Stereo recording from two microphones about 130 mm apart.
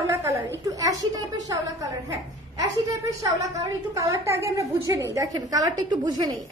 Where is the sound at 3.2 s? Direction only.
25° right (ahead or behind).